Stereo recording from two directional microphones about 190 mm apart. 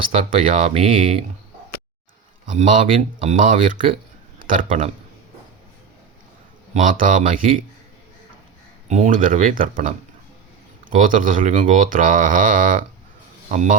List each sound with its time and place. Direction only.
0.1 s speech: 35° right (ahead or behind)
2.5 s speech: 40° right (ahead or behind)
6.7 s speech: 45° right (ahead or behind)
8.9 s speech: 40° right (ahead or behind)